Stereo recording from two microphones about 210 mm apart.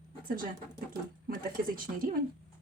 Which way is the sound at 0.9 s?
40° right (ahead or behind).